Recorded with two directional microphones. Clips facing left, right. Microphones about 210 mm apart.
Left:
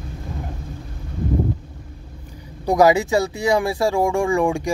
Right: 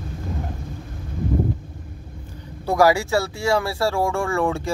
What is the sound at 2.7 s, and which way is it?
Speech, 20° left (ahead or behind).